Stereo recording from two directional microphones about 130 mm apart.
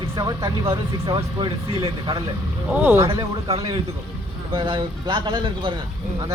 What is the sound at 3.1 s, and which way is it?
A man's voice, 45° right (ahead or behind).